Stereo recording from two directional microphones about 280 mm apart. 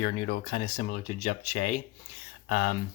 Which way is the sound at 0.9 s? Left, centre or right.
Left.